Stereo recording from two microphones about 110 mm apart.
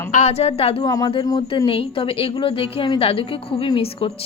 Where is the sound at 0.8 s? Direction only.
35° left (ahead or behind).